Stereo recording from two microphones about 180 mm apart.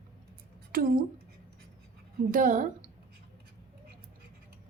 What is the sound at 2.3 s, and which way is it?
Speech, 50° right (ahead or behind).